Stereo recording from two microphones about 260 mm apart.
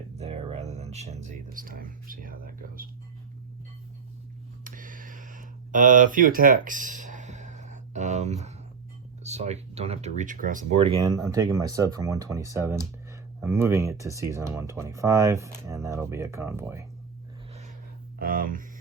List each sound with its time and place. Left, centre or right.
0.2 s speech: right
4.6 s a sound: right
9.2 s speech: right; by 16.8 s centre
18.2 s speech: right